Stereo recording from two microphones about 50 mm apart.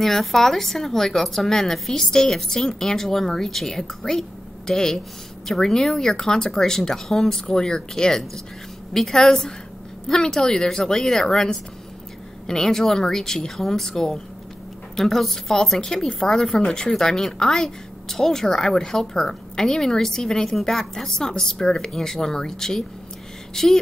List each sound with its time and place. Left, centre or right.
0.0 s speech: centre